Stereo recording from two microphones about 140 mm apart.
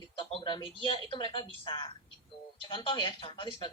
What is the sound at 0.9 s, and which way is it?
Speech, 40° left (ahead or behind).